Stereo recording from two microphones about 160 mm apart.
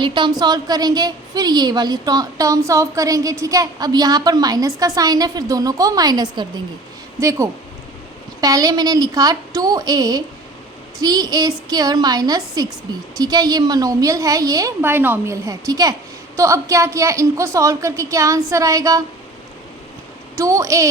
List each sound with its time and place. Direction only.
0.0 s a woman's voice: 30° right (ahead or behind)
20.3 s a woman's voice: 20° right (ahead or behind)